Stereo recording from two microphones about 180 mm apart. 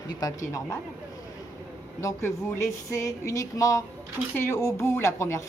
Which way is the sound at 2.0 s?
15° left (ahead or behind).